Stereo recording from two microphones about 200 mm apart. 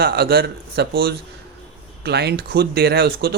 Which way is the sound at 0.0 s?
50° right (ahead or behind).